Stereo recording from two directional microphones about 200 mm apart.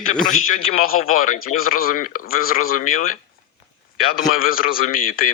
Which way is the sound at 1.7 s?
45° left (ahead or behind).